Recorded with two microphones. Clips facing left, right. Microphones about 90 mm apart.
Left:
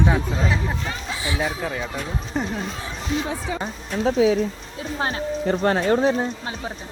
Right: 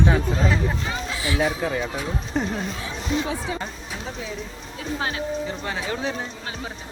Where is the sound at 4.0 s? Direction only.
85° left.